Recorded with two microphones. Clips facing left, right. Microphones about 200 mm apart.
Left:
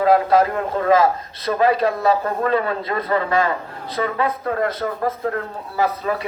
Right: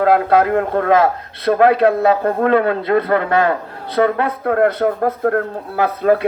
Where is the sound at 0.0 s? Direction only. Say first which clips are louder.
Right 2 dB; 60° right (ahead or behind).